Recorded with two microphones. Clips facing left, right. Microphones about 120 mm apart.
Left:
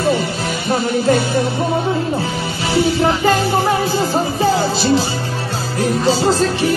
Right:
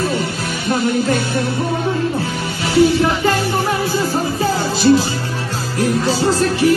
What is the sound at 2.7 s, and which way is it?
Music, 25° left (ahead or behind).